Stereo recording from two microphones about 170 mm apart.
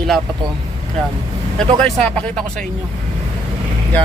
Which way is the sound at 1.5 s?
5° left (ahead or behind).